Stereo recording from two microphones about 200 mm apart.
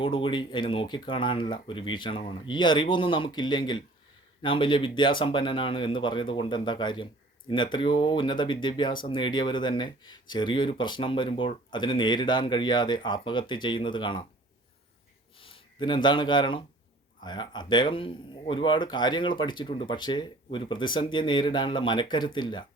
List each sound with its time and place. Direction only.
0.0 s speech: 25° left (ahead or behind)
15.4 s speech: 25° left (ahead or behind)